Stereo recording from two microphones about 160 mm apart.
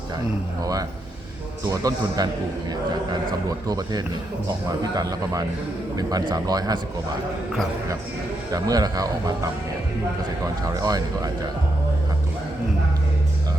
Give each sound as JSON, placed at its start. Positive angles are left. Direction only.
{"t": 0.6, "sound": "speech", "side_deg": -20}
{"t": 3.7, "sound": "speech", "side_deg": -25}
{"t": 8.5, "sound": "speech", "side_deg": -25}
{"t": 10.4, "sound": "speech", "side_deg": -20}